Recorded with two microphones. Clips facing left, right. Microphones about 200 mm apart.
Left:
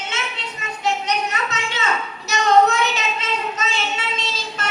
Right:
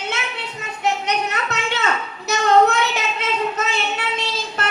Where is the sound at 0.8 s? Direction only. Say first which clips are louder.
Right 1 dB; 60° right (ahead or behind).